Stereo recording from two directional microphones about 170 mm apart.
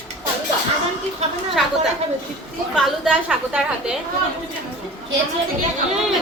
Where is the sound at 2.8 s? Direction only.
5° right (ahead or behind).